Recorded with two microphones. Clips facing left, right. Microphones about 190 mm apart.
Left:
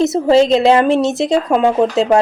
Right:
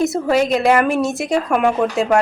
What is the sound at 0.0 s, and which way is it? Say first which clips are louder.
A woman's voice: left 5 dB; 25° left (ahead or behind).